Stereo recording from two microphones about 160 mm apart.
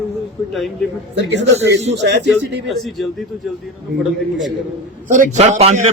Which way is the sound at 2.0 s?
90° right.